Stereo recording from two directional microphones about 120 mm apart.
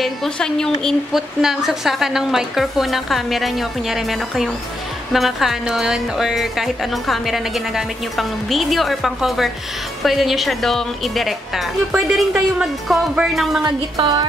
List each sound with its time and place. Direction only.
0.0 s speech: 5° left (ahead or behind)
13.6 s music: 35° right (ahead or behind)